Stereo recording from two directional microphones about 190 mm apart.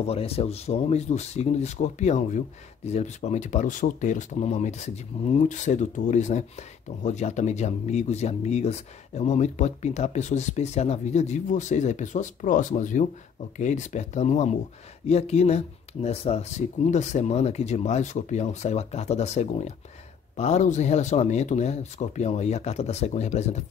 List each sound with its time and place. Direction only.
0.0 s speech: 30° left (ahead or behind)